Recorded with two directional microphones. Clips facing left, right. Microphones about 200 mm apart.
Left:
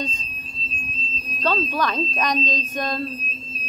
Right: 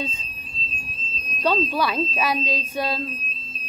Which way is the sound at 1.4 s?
10° right (ahead or behind).